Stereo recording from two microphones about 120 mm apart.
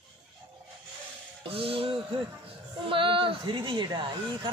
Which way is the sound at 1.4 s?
50° right (ahead or behind).